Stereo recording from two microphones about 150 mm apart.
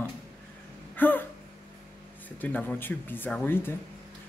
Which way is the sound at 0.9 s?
15° left (ahead or behind).